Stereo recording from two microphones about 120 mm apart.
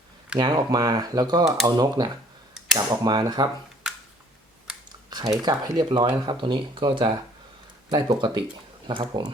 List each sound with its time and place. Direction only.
0.3 s speech: 35° right (ahead or behind)
4.9 s typing: 35° right (ahead or behind)
5.4 s speech: 35° right (ahead or behind)